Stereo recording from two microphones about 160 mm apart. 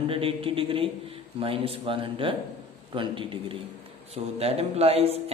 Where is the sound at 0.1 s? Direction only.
35° right (ahead or behind).